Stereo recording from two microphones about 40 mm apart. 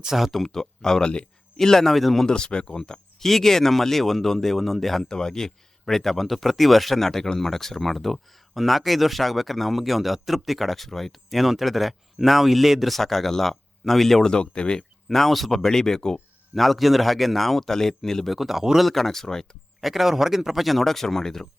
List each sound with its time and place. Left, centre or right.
0.0 s speech: centre
0.4 s speech: centre
2.2 s speech: left
3.2 s speech: centre
14.3 s speech: left
15.1 s speech: centre
16.6 s speech: centre
18.3 s speech: centre
18.8 s speech: centre
19.8 s speech: centre